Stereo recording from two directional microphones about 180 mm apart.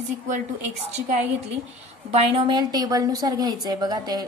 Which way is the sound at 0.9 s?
40° right (ahead or behind).